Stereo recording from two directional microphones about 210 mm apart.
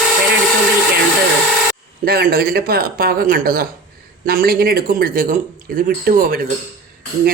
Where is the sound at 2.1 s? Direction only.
45° right (ahead or behind).